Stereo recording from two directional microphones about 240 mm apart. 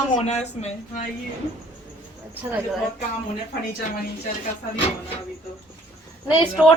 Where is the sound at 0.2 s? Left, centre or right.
Left.